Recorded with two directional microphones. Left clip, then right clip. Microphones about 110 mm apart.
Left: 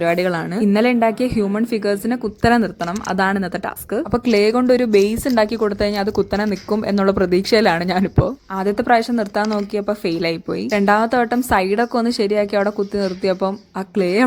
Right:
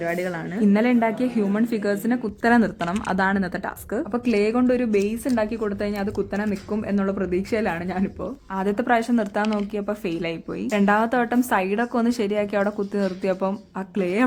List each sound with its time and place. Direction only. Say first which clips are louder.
0.0 s speech: left 8 dB; 35° left (ahead or behind); by 2.6 s 20° left (ahead or behind)
2.8 s speech: left 3 dB; 5° left (ahead or behind)
3.2 s speech: left 6 dB; 20° left (ahead or behind); by 8.3 s 40° left (ahead or behind)
8.5 s speech: left 5 dB; 25° left (ahead or behind)
9.4 s speech: left 5 dB; 35° left (ahead or behind)